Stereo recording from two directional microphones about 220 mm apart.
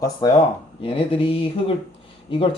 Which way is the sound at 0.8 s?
25° left (ahead or behind).